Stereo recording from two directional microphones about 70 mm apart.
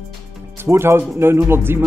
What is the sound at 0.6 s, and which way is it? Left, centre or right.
Speech, right.